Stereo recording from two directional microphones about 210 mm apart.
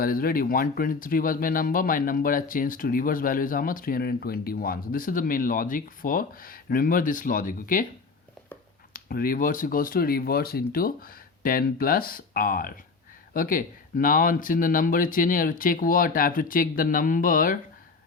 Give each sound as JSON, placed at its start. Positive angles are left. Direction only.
{"t": 0.0, "sound": "speech", "side_deg": 45}
{"t": 8.9, "sound": "speech", "side_deg": 45}